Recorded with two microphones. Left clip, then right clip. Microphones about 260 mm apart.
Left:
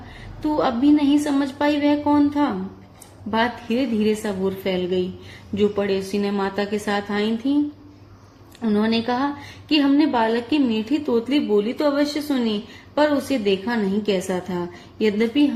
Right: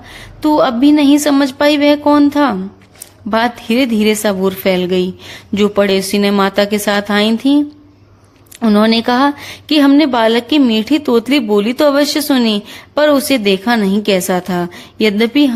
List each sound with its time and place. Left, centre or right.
0.4 s speech: right
8.6 s speech: right